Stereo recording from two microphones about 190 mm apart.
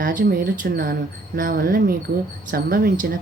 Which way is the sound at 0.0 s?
45° right (ahead or behind).